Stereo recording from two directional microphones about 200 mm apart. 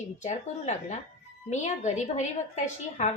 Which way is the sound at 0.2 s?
35° left (ahead or behind).